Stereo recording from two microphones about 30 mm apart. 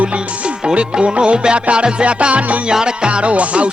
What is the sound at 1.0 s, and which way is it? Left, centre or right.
Music, right.